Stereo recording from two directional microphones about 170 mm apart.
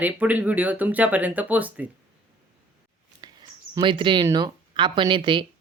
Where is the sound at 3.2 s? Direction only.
25° right (ahead or behind).